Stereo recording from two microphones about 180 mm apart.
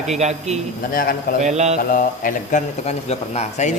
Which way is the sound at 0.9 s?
55° left (ahead or behind).